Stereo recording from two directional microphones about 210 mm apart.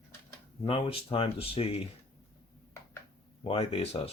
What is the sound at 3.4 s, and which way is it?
Speech, 25° left (ahead or behind).